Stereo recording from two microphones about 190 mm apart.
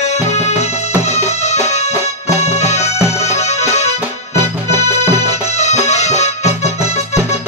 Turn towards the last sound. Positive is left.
turn(degrees=35)  # may be behind; listen again after turning